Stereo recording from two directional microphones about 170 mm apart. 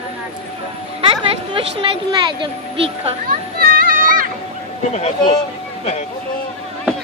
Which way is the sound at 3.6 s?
55° right (ahead or behind).